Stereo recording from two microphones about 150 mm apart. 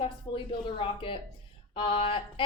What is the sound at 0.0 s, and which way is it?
A woman's voice, 35° left (ahead or behind).